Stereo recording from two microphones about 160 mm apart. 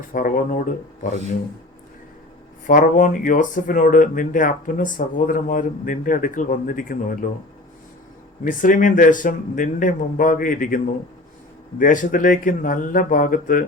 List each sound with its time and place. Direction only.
0.1 s speech: 60° left (ahead or behind)
2.6 s speech: 55° left (ahead or behind)
8.4 s speech: 55° left (ahead or behind)